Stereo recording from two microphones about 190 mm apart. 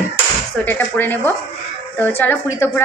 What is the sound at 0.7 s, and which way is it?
A woman's voice, 10° left (ahead or behind).